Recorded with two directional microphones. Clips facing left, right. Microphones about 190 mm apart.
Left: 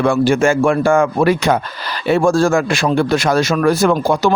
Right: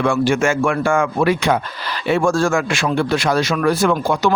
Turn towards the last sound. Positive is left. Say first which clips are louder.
# left 3 dB
turn(degrees=40)  # may be behind; listen again after turning